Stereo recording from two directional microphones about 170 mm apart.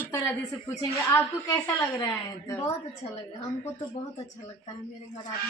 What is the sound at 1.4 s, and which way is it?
A woman's voice, 15° left (ahead or behind).